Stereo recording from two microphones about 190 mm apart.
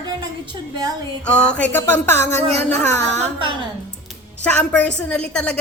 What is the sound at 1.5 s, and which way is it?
Speech, 10° left (ahead or behind).